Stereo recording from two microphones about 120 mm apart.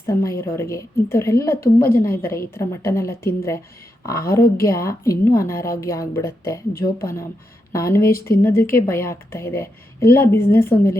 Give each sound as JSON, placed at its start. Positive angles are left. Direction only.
{"t": 0.0, "sound": "a woman's voice", "side_deg": 25}